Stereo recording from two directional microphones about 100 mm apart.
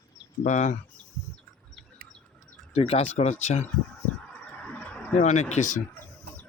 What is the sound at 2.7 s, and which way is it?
Speech, 85° left.